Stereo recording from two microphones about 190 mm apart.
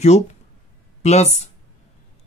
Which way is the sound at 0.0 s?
35° left (ahead or behind).